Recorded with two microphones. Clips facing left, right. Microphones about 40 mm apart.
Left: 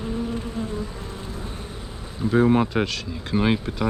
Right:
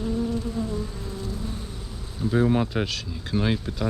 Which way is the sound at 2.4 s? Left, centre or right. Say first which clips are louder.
Left 4 dB; centre.